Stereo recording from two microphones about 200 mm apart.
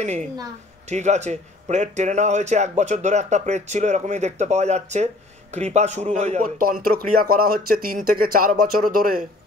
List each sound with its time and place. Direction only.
0.0 s speech: 35° right (ahead or behind)